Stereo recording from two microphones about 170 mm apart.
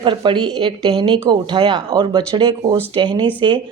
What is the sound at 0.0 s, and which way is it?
Speech, 30° right (ahead or behind).